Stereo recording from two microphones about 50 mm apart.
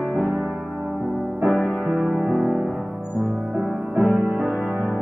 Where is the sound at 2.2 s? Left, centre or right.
Centre.